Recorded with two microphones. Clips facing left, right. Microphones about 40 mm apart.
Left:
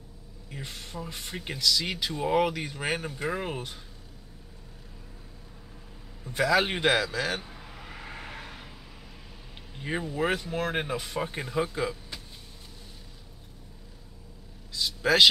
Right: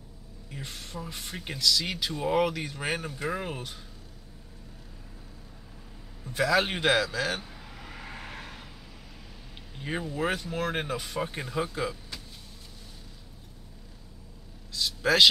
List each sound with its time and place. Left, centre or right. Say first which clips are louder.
0.5 s speech: even; centre
6.2 s vehicle: left 1 dB; centre
9.8 s speech: left 2 dB; centre
14.7 s a sound: left 1 dB; centre